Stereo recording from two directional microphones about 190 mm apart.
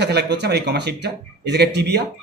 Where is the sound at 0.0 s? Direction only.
60° right (ahead or behind).